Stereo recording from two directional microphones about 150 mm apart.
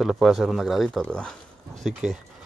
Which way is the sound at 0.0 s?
Centre (ahead or behind).